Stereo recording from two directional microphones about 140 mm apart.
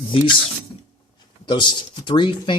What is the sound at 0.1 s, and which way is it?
Speech, 40° left (ahead or behind).